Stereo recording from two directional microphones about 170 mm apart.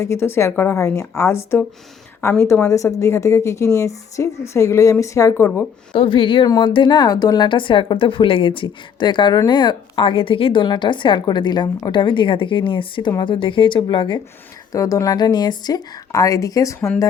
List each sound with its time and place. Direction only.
0.0 s a woman's voice: 15° left (ahead or behind)
5.9 s a woman's voice: 30° left (ahead or behind)